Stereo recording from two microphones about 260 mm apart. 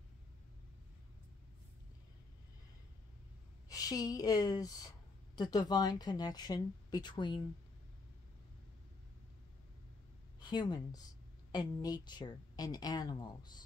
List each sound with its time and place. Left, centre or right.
3.6 s a woman's voice: centre
10.5 s a woman's voice: centre